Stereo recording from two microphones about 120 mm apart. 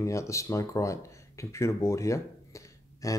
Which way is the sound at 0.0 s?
25° left (ahead or behind).